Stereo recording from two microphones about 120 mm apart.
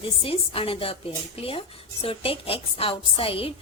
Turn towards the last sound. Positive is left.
turn(degrees=50)  # may be behind; listen again after turning